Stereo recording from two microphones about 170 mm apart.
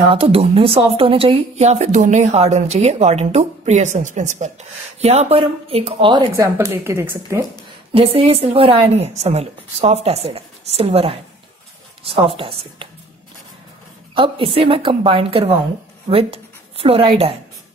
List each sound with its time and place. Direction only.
0.1 s speech: 35° right (ahead or behind); by 7.4 s 15° right (ahead or behind)
7.9 s speech: 35° right (ahead or behind)
14.1 s speech: 30° right (ahead or behind)